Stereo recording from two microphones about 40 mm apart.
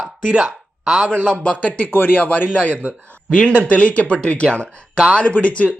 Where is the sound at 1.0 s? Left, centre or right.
Right.